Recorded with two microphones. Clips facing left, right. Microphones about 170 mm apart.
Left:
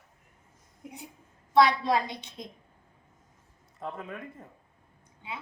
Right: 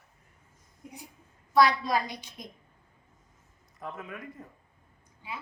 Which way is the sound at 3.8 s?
30° left (ahead or behind).